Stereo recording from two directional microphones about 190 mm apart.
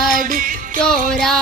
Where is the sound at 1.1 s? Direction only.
Centre (ahead or behind).